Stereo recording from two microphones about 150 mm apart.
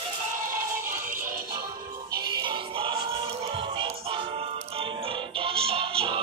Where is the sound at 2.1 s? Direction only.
30° right (ahead or behind).